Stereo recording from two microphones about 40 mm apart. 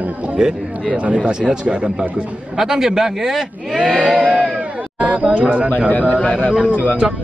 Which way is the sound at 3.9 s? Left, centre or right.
Right.